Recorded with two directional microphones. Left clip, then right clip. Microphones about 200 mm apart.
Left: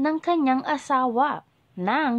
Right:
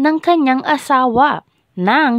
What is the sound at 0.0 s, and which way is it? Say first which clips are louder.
A woman's voice: right 9 dB; 45° right (ahead or behind).